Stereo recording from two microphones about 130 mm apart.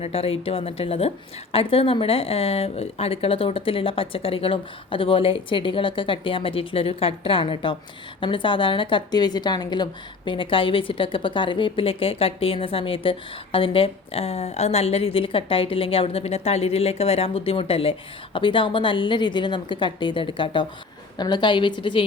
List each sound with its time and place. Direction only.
0.0 s a woman's voice: 50° left (ahead or behind)